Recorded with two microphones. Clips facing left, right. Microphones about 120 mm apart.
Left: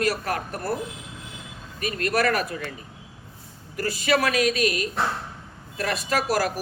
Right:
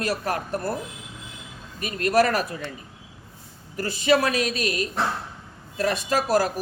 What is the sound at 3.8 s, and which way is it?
Speech, 25° right (ahead or behind).